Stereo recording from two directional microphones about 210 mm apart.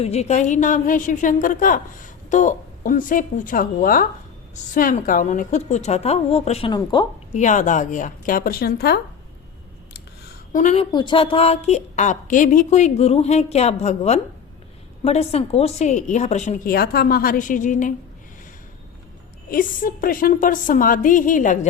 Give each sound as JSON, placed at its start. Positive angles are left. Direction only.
{"t": 0.0, "sound": "a woman's voice", "side_deg": 30}
{"t": 7.3, "sound": "a woman's voice", "side_deg": 35}
{"t": 10.5, "sound": "a woman's voice", "side_deg": 35}
{"t": 10.9, "sound": "a woman's voice", "side_deg": 25}
{"t": 19.5, "sound": "a woman's voice", "side_deg": 40}